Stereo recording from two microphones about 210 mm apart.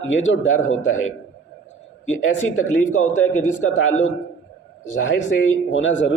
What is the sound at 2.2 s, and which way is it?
Speech, 70° left (ahead or behind).